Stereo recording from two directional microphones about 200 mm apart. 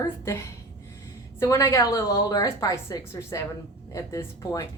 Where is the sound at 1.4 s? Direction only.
15° left (ahead or behind).